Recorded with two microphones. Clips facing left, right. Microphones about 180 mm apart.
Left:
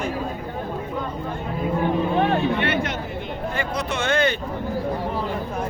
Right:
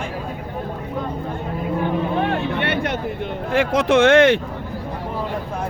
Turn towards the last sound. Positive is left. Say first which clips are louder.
# right 10 dB
turn(degrees=-90)